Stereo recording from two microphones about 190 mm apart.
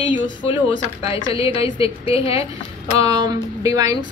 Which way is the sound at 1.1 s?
30° left (ahead or behind).